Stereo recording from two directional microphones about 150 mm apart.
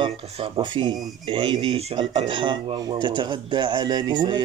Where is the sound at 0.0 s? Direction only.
35° right (ahead or behind).